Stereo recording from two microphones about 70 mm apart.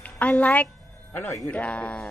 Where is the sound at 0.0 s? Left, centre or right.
Left.